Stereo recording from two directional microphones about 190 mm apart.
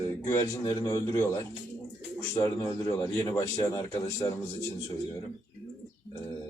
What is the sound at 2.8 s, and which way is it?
Speech, 15° left (ahead or behind).